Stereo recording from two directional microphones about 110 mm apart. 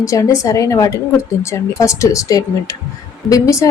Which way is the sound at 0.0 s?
30° left (ahead or behind).